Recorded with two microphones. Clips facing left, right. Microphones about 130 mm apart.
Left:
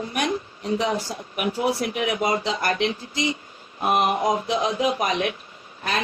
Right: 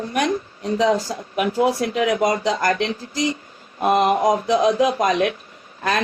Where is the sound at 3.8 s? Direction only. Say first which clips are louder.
Right 4 dB; 85° right.